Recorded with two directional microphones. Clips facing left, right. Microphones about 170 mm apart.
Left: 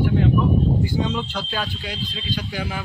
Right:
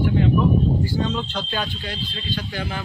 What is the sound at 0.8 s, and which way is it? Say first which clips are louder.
Speech: even; 15° left (ahead or behind).